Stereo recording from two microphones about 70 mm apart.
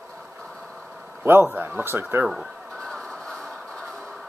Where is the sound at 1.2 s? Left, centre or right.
Right.